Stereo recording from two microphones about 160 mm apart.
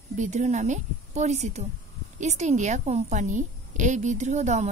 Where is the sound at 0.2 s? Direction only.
50° right (ahead or behind).